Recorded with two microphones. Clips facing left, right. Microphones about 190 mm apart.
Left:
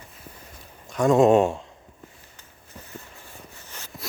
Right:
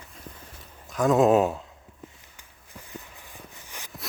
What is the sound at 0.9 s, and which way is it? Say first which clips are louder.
Speech: left 2 dB; centre (ahead or behind).